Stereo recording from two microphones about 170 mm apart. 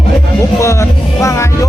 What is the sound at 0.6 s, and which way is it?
Music, 15° left (ahead or behind).